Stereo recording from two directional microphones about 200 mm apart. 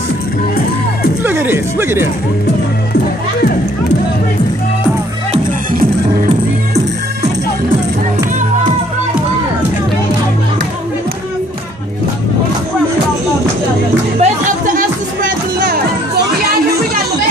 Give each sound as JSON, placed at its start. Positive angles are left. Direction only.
{"t": 1.2, "sound": "speech", "side_deg": -10}
{"t": 5.3, "sound": "music", "side_deg": -35}
{"t": 14.2, "sound": "music", "side_deg": -30}
{"t": 14.8, "sound": "music", "side_deg": -45}